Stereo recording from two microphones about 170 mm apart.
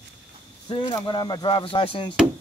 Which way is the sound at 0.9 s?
25° left (ahead or behind).